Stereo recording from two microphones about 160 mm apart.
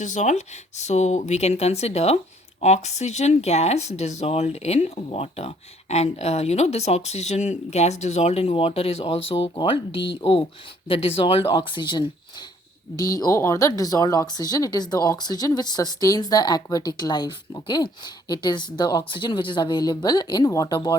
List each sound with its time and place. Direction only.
0.0 s speech: 50° left (ahead or behind); by 20.9 s 25° left (ahead or behind)